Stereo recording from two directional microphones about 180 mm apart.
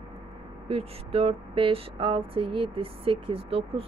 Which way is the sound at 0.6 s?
30° right (ahead or behind).